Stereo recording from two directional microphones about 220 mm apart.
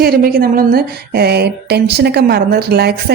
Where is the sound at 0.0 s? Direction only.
45° right (ahead or behind).